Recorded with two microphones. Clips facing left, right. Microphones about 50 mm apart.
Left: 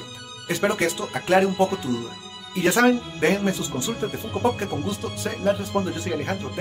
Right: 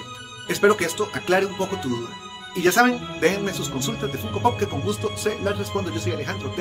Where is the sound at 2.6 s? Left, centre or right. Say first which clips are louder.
Right 1 dB; centre.